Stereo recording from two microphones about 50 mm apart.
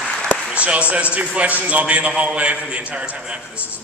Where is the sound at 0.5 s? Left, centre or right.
Right.